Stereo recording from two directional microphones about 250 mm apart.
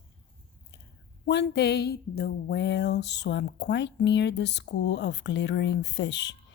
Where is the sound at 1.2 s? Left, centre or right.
Left.